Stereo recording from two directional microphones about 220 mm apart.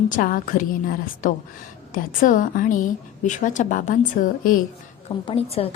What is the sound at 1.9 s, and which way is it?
A woman's voice, 40° left (ahead or behind).